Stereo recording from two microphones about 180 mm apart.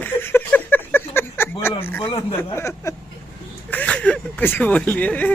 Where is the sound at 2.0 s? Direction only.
30° left (ahead or behind).